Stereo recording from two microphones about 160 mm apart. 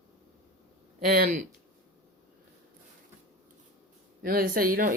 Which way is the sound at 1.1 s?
70° right (ahead or behind).